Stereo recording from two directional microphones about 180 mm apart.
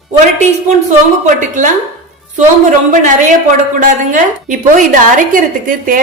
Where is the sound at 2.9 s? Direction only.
45° right (ahead or behind).